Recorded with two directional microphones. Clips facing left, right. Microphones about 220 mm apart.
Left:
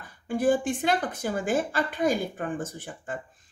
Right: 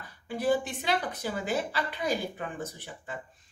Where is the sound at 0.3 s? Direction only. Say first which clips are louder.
Left 4 dB; 50° left (ahead or behind).